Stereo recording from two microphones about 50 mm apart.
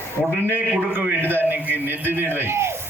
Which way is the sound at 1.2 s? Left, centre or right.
Right.